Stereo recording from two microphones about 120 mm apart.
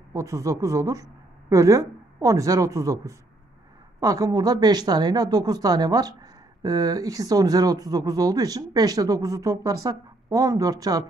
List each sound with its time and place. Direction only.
0.1 s a woman's voice: 25° right (ahead or behind)